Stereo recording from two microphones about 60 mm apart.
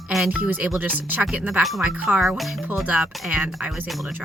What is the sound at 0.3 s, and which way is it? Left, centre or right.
Speech, right.